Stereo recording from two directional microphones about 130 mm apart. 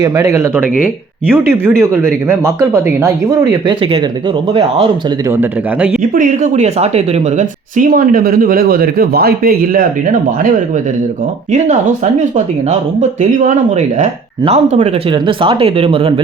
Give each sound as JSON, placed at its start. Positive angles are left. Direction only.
{"t": 0.0, "sound": "a man's voice", "side_deg": -25}
{"t": 5.4, "sound": "a man's voice", "side_deg": -10}
{"t": 6.0, "sound": "speech", "side_deg": -80}
{"t": 7.8, "sound": "speech", "side_deg": -90}
{"t": 9.7, "sound": "speech", "side_deg": -90}
{"t": 13.0, "sound": "speech", "side_deg": -65}
{"t": 15.1, "sound": "speech", "side_deg": -40}